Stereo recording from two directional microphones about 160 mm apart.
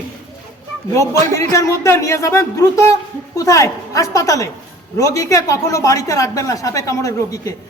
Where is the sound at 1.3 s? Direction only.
20° left (ahead or behind).